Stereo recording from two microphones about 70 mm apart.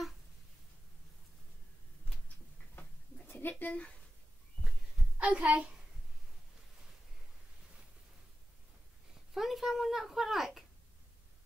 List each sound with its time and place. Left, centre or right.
3.3 s a sound: left
5.2 s a child's voice: centre
9.3 s speech: centre